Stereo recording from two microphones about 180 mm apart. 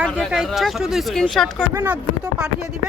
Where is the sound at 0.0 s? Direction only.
5° right (ahead or behind).